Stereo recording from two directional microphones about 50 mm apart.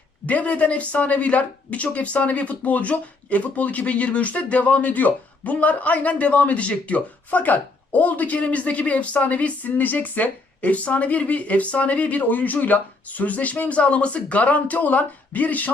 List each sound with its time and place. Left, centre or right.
0.3 s speech: left